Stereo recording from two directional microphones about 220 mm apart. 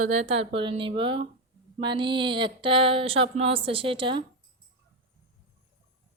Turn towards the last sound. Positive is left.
turn(degrees=-20)  # may be behind; listen again after turning